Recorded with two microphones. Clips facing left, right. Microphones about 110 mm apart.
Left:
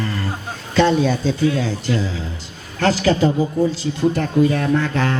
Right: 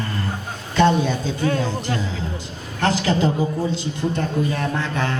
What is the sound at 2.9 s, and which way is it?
Speech, 25° right (ahead or behind).